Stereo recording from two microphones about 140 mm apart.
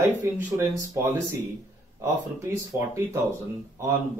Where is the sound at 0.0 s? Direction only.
20° right (ahead or behind).